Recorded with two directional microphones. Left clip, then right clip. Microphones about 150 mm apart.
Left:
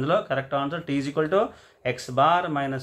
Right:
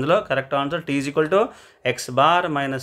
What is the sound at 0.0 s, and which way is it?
Speech, 40° right (ahead or behind).